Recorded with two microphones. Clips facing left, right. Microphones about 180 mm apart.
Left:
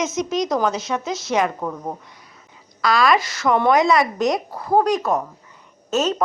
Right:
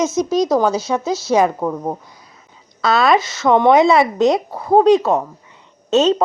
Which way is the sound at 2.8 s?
25° right (ahead or behind).